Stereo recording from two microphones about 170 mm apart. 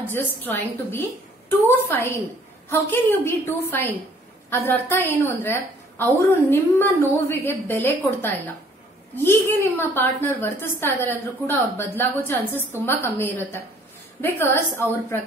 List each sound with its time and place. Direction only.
0.0 s a woman's voice: 10° left (ahead or behind)